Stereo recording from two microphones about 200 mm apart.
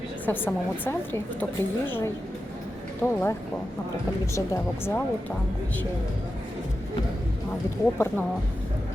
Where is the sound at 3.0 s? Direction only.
10° left (ahead or behind).